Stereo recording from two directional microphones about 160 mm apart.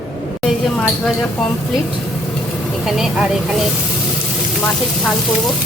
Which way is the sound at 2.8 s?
Centre (ahead or behind).